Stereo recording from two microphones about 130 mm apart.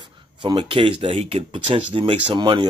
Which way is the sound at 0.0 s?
35° right (ahead or behind).